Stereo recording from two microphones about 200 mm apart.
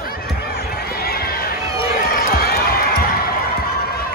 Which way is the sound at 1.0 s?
50° left (ahead or behind).